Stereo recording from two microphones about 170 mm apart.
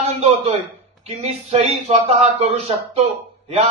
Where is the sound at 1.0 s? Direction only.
35° right (ahead or behind).